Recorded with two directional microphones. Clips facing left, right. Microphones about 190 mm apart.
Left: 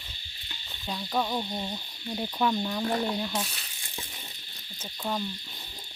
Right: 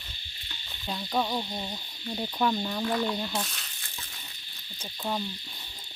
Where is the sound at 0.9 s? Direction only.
5° right (ahead or behind).